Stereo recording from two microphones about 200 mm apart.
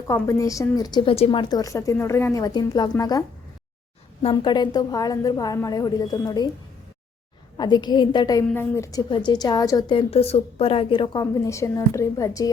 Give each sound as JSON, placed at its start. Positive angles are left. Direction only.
{"t": 0.1, "sound": "a woman's voice", "side_deg": 15}
{"t": 7.5, "sound": "a woman's voice", "side_deg": 20}